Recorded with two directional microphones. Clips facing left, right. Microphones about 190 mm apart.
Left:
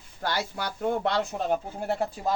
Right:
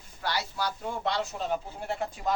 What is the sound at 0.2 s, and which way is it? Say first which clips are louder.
Speech: left 2 dB; 50° left (ahead or behind).